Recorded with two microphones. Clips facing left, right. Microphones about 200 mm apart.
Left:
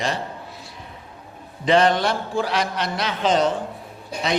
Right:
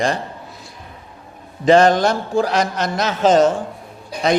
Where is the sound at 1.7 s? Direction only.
45° right (ahead or behind).